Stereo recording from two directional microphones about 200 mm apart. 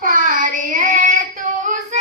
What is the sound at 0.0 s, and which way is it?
Child singing, 45° right (ahead or behind).